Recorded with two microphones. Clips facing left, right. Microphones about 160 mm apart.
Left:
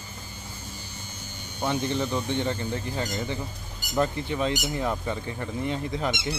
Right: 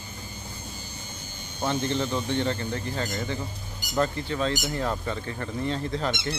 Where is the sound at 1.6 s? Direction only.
15° left (ahead or behind).